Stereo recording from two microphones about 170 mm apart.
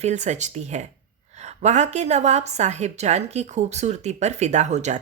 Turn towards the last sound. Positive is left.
turn(degrees=-45)  # may be behind; listen again after turning